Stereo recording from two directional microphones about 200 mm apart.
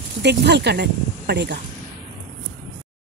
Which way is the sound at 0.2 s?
55° right (ahead or behind).